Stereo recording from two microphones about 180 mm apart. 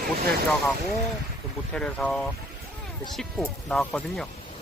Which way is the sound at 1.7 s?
5° left (ahead or behind).